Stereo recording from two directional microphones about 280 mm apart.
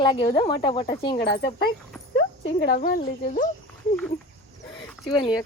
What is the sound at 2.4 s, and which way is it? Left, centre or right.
Speech, left.